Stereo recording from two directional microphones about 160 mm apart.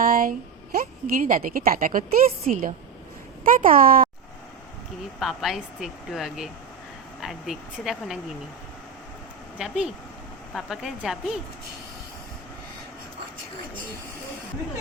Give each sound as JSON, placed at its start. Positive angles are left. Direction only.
{"t": 0.0, "sound": "a woman's voice", "side_deg": -60}
{"t": 5.2, "sound": "speech", "side_deg": 0}
{"t": 9.6, "sound": "speech", "side_deg": -5}